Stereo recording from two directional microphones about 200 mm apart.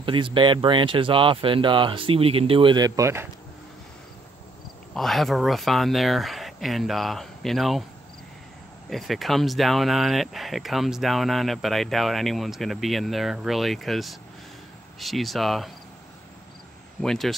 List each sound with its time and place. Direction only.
0.0 s speech: 25° right (ahead or behind)
4.9 s speech: centre (ahead or behind)
8.9 s speech: centre (ahead or behind)
17.0 s speech: centre (ahead or behind)